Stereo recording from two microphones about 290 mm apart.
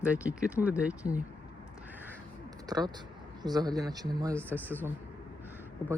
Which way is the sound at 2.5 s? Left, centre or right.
Centre.